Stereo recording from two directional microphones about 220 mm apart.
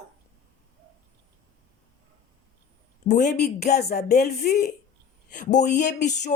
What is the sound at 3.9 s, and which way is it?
Speech, 45° left (ahead or behind).